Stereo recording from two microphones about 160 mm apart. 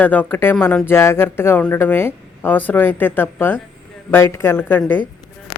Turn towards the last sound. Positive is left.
turn(degrees=10)  # may be behind; listen again after turning